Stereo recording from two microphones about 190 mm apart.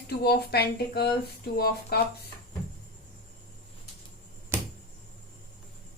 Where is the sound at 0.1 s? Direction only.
55° left (ahead or behind).